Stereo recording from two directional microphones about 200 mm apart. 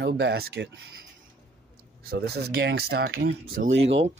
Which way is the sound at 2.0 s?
55° right (ahead or behind).